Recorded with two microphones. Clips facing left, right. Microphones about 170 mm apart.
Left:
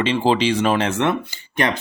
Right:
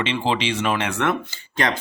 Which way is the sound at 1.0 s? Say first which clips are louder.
Left 2 dB; 20° left (ahead or behind).